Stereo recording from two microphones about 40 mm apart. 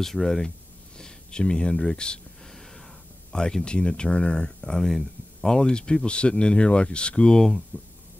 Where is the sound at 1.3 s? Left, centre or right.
Left.